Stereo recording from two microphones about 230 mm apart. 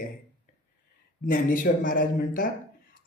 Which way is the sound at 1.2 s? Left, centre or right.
Left.